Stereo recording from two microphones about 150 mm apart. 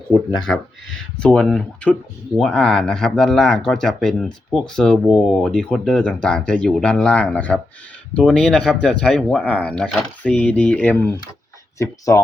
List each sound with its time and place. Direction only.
1.2 s speech: 5° left (ahead or behind)